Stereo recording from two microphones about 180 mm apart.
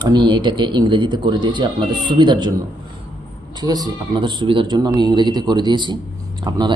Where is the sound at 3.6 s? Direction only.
20° right (ahead or behind).